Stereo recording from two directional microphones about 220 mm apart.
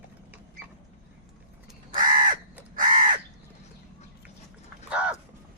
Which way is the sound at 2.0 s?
40° right (ahead or behind).